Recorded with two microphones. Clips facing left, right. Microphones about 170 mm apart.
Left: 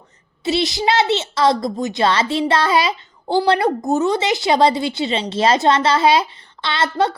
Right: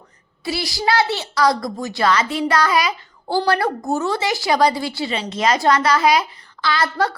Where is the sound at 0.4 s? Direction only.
20° left (ahead or behind).